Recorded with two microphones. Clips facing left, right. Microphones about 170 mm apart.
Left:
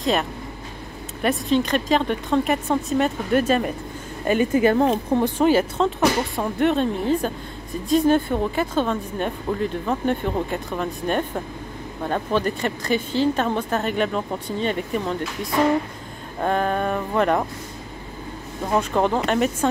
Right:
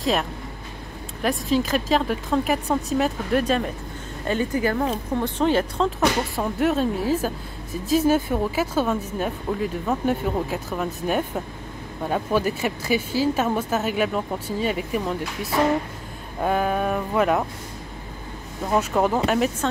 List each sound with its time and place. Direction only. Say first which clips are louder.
0.0 s speech: left 1 dB; centre (ahead or behind)
4.3 s speech: left 5 dB; 15° left (ahead or behind)
5.4 s speech: left 1 dB; 5° left (ahead or behind)
18.7 s speech: even; 5° right (ahead or behind)